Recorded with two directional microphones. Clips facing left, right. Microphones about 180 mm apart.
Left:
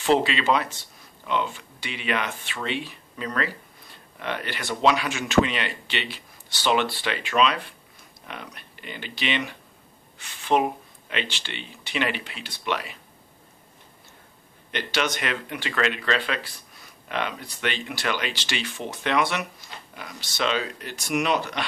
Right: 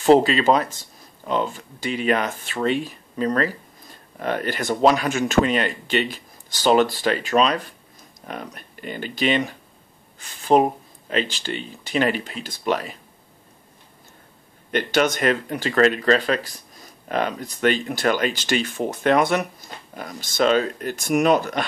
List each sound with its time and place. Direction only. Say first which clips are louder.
0.0 s speech: right 6 dB; 40° right (ahead or behind)
14.7 s speech: right 7 dB; 50° right (ahead or behind)